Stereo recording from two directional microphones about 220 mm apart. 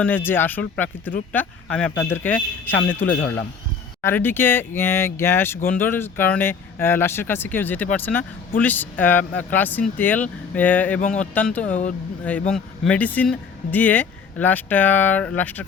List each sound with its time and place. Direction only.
0.0 s speech: 10° left (ahead or behind)
11.7 s speech: 35° left (ahead or behind)
12.5 s speech: centre (ahead or behind)